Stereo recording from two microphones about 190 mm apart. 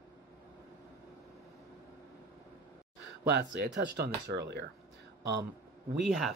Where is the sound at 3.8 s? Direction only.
60° right (ahead or behind).